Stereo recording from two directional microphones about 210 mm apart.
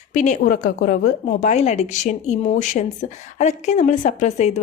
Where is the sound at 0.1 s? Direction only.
35° left (ahead or behind).